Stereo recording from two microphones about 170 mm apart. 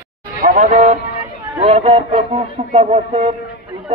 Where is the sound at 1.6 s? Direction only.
35° right (ahead or behind).